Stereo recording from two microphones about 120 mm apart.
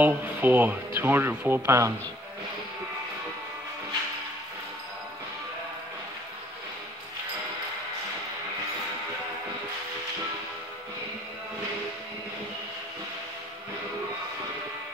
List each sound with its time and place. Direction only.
0.0 s speech: 15° right (ahead or behind)